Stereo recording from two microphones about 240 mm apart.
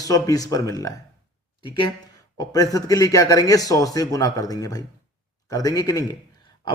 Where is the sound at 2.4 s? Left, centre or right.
Centre.